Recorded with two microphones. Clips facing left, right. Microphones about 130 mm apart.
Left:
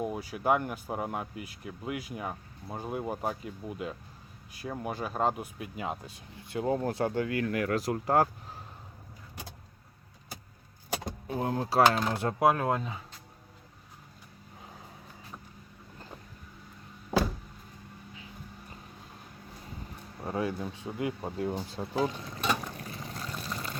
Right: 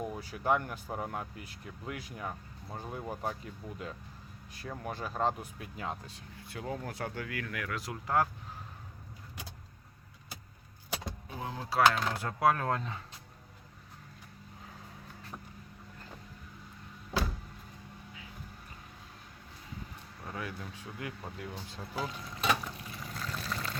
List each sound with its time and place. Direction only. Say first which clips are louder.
0.0 s speech: left 4 dB; 10° left (ahead or behind)
6.6 s speech: left 9 dB; 30° left (ahead or behind)
10.9 s vehicle: left 6 dB; 50° left (ahead or behind)
11.6 s speech: left 2 dB; 35° left (ahead or behind)
12.1 s speech: left 3 dB; 25° left (ahead or behind); by 13.0 s 10° left (ahead or behind)
20.1 s speech: left 9 dB; 30° left (ahead or behind)
22.6 s vehicle: left 3 dB; 45° left (ahead or behind)
22.9 s vehicle: left 1 dB; 30° left (ahead or behind)
23.4 s a sound: even; centre (ahead or behind)